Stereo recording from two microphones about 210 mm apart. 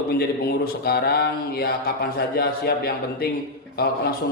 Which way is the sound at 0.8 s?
50° left (ahead or behind).